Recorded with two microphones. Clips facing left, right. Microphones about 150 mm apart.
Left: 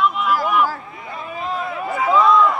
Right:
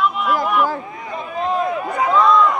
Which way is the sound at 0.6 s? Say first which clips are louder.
Right 2 dB; 20° right (ahead or behind).